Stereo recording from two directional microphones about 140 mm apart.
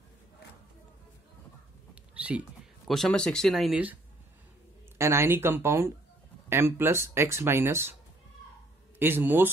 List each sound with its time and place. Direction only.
2.1 s a sound: 10° right (ahead or behind)
2.9 s speech: 5° left (ahead or behind)
4.9 s speech: 20° right (ahead or behind)
9.0 s speech: 15° right (ahead or behind)